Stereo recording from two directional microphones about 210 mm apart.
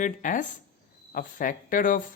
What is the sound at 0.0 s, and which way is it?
Speech, 40° left (ahead or behind).